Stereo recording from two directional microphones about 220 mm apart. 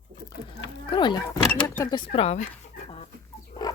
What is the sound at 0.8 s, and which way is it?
Speech, 20° left (ahead or behind).